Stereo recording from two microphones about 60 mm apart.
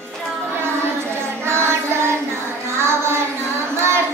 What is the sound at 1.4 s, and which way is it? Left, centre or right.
Child singing, right.